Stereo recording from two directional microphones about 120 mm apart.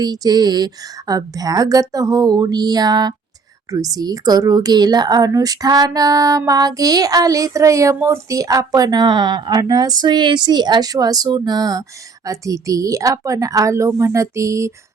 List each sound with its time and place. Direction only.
0.0 s a woman's voice: 35° right (ahead or behind)